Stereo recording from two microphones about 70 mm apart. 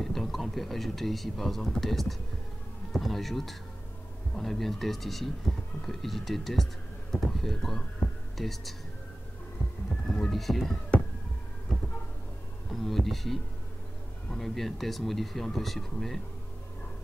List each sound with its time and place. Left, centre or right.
0.0 s speech: centre
10.0 s speech: centre
12.6 s speech: centre